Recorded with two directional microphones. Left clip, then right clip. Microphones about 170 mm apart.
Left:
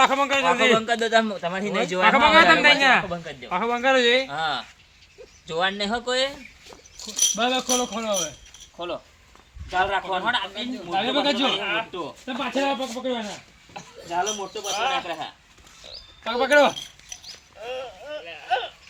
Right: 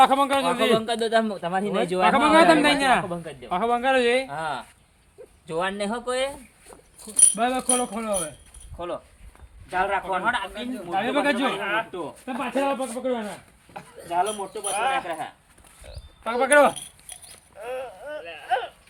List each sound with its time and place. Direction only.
0.0 s a man's voice: 70° right (ahead or behind); by 4.3 s 45° right (ahead or behind)
4.3 s speech: 30° right (ahead or behind)
7.0 s speech: 15° right (ahead or behind)
9.6 s speech: centre (ahead or behind)
17.6 s a sound: centre (ahead or behind)